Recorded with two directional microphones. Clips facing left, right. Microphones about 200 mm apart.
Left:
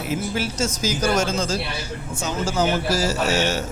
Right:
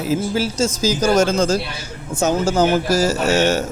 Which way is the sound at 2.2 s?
45° right (ahead or behind).